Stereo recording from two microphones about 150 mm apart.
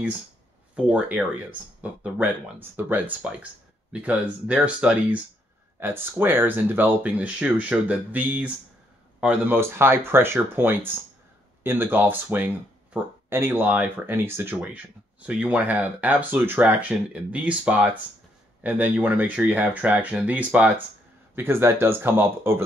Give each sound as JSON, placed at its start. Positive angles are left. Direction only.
{"t": 0.7, "sound": "speech", "side_deg": -5}